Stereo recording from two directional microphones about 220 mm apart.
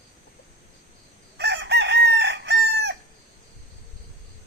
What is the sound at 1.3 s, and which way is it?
Chicken, 50° right (ahead or behind).